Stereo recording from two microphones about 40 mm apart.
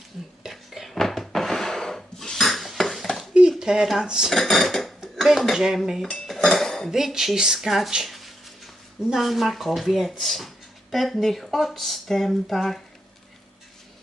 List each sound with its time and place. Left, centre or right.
0.5 s a sound: centre
0.9 s dishes: centre
3.6 s speech: centre
4.0 s speech: centre
4.3 s speech: centre
5.5 s cutlery: centre
6.2 s dishes: centre
6.9 s cutlery: centre
7.7 s speech: centre
8.0 s a sound: centre
9.2 s speech: centre